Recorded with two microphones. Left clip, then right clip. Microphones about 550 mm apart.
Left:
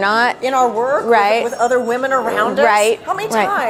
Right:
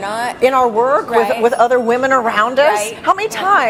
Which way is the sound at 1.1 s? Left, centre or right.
Left.